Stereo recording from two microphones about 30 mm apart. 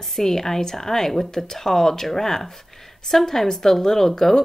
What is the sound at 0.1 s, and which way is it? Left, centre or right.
A woman's voice, centre.